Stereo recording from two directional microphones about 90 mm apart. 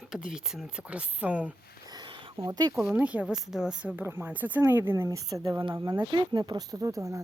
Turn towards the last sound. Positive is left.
turn(degrees=-35)  # may be behind; listen again after turning